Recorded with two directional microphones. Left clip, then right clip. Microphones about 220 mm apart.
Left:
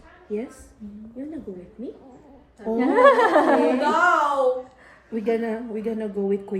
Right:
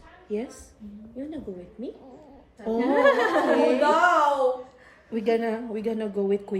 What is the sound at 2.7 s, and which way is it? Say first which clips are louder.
Speech: left 4 dB; 5° right (ahead or behind).